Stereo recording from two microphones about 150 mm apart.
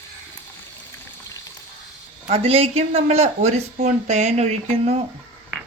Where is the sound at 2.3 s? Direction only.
40° right (ahead or behind).